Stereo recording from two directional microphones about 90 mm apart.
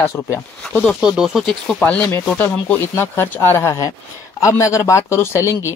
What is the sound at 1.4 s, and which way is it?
Speech, 10° left (ahead or behind).